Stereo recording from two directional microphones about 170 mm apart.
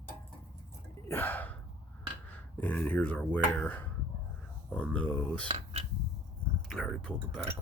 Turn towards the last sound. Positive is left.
turn(degrees=5)  # may be behind; listen again after turning